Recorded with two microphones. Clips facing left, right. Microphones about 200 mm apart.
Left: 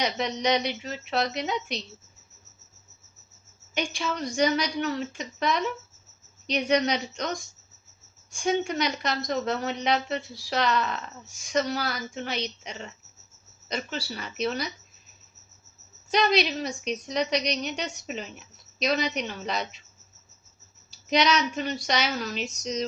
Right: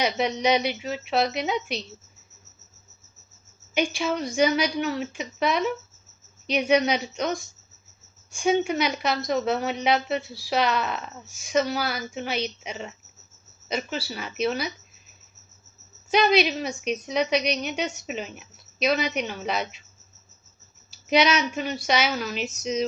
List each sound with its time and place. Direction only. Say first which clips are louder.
0.0 s a woman's voice: right 3 dB; 5° right (ahead or behind)
3.8 s a woman's voice: right 5 dB; 5° right (ahead or behind)
16.0 s a woman's voice: right 3 dB; 5° right (ahead or behind)
20.9 s a woman's voice: right 2 dB; 5° right (ahead or behind)